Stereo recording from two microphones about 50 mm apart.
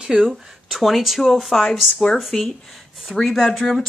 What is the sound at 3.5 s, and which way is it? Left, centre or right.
Speech, centre.